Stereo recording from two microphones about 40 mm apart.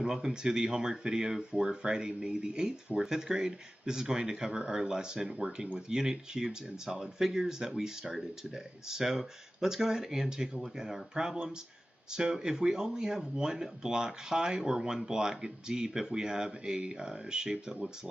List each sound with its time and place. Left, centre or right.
0.0 s speech: centre